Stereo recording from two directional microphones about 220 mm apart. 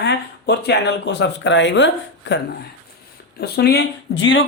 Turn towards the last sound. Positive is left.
turn(degrees=60)  # may be behind; listen again after turning